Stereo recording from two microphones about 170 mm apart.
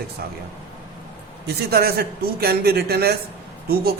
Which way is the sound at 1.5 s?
65° right (ahead or behind).